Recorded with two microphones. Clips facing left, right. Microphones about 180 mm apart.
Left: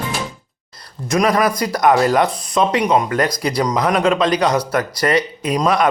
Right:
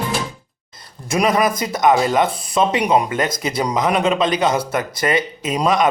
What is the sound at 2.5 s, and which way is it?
A man's voice, 5° right (ahead or behind).